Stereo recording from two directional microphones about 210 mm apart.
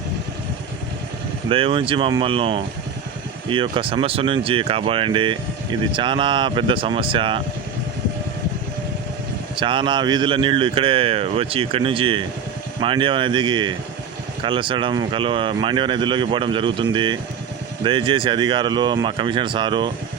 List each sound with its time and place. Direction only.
1.5 s speech: 25° right (ahead or behind)
9.6 s speech: 25° right (ahead or behind)